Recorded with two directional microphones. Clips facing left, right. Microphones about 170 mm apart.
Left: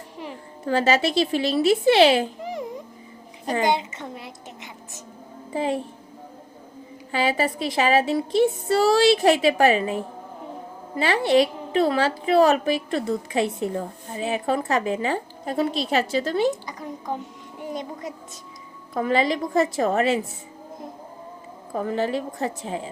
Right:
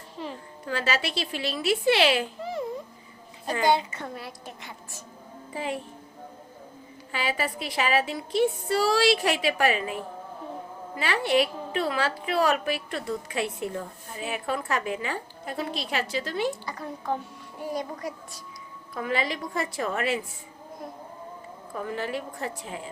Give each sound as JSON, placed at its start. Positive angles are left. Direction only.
{"t": 0.2, "sound": "a sound", "side_deg": 15}
{"t": 0.6, "sound": "a woman's voice", "side_deg": 40}
{"t": 2.4, "sound": "a sound", "side_deg": 15}
{"t": 3.4, "sound": "a woman's voice", "side_deg": 20}
{"t": 7.1, "sound": "a woman's voice", "side_deg": 30}
{"t": 9.0, "sound": "a woman's voice", "side_deg": 25}
{"t": 9.3, "sound": "a woman's voice", "side_deg": 40}
{"t": 9.6, "sound": "a woman's voice", "side_deg": 25}
{"t": 11.7, "sound": "a woman's voice", "side_deg": 35}
{"t": 18.9, "sound": "a woman's voice", "side_deg": 30}
{"t": 21.7, "sound": "a woman's voice", "side_deg": 35}